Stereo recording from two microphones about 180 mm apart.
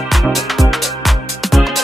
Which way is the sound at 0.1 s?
Centre (ahead or behind).